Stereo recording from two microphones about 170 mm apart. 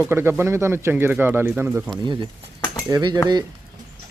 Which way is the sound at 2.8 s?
25° right (ahead or behind).